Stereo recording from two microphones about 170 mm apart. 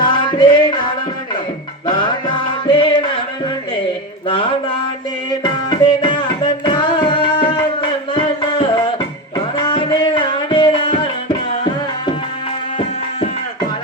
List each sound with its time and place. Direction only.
0.0 s music: 25° left (ahead or behind)
1.9 s music: 25° left (ahead or behind)
5.4 s music: 30° left (ahead or behind)